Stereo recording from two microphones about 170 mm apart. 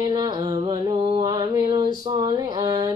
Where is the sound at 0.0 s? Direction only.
25° right (ahead or behind).